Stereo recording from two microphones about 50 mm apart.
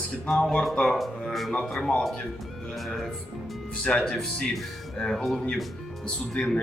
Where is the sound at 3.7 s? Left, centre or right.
Centre.